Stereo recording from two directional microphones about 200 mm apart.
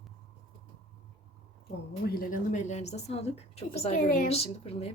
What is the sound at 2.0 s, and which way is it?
A child's voice, 45° left (ahead or behind).